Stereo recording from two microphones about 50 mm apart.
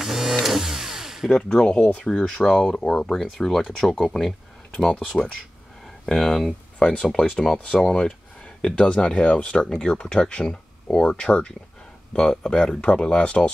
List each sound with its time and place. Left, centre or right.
0.0 s a sound: centre
1.3 s speech: centre
6.0 s speech: centre